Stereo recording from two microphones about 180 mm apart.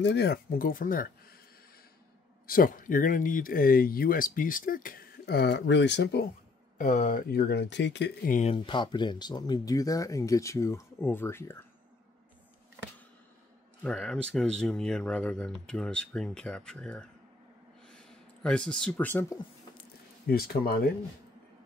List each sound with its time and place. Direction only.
0.0 s speech: 70° left (ahead or behind); by 1.3 s 50° left (ahead or behind)
2.4 s speech: 50° left (ahead or behind); by 6.2 s 75° left (ahead or behind)
6.8 s speech: 45° left (ahead or behind); by 8.1 s 75° left (ahead or behind)
8.3 s speech: 40° left (ahead or behind)
8.5 s speech: 25° left (ahead or behind)
13.8 s speech: 5° left (ahead or behind)
17.8 s a sound: 5° left (ahead or behind)
20.2 s speech: 55° left (ahead or behind)